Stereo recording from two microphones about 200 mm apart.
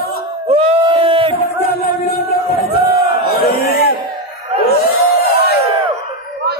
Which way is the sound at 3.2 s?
50° left (ahead or behind).